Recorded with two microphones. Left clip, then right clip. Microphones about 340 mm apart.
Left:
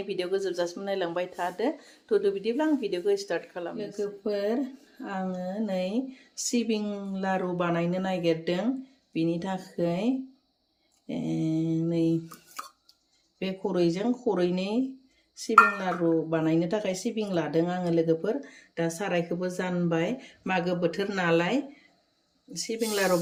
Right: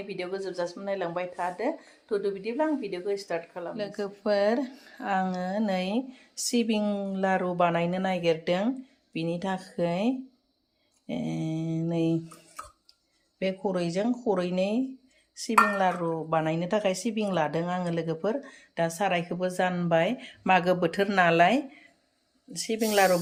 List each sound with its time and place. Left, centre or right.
0.1 s speech: centre
13.4 s speech: centre